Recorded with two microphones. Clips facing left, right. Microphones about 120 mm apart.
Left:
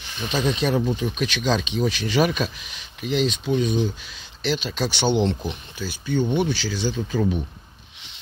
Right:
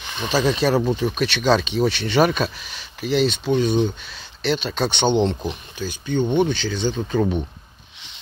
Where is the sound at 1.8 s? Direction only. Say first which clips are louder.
Right 2 dB; 65° right (ahead or behind).